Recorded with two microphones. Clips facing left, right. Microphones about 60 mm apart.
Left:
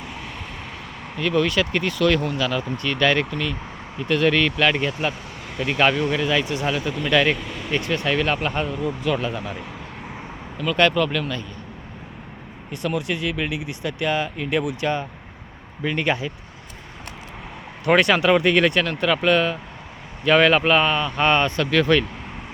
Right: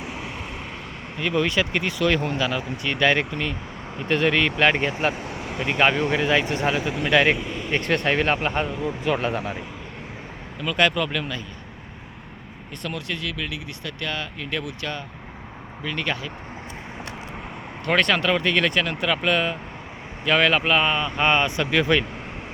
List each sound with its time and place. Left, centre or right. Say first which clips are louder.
0.0 s vehicle: right 2 dB; centre
1.1 s speech: left 2 dB; centre
2.5 s speech: left 2 dB; centre; by 5.1 s right
5.5 s speech: left 1 dB; centre
6.9 s speech: left 1 dB; centre
7.3 s a sound: right 2 dB; centre
7.8 s speech: right 2 dB; right
8.0 s speech: even; right
10.6 s speech: left 3 dB; centre
12.8 s speech: left 6 dB; centre
17.8 s speech: left 4 dB; centre